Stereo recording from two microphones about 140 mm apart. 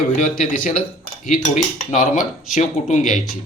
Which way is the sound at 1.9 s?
65° left (ahead or behind).